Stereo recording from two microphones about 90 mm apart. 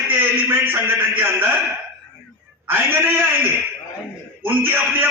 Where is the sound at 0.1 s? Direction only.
25° right (ahead or behind).